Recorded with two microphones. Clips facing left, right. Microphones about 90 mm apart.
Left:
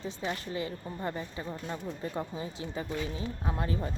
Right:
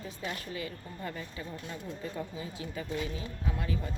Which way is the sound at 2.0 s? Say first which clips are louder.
Left 3 dB; 35° left (ahead or behind).